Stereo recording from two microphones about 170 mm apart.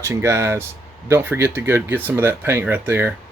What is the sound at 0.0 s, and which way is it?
Speech, 15° right (ahead or behind).